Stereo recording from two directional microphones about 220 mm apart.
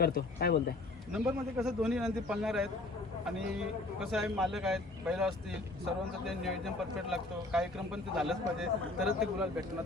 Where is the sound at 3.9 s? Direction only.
Centre (ahead or behind).